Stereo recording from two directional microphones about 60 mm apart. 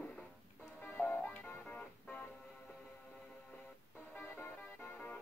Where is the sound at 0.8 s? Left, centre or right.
Left.